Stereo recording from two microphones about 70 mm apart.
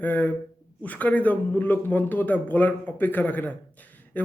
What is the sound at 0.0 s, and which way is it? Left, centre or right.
A man's voice, left.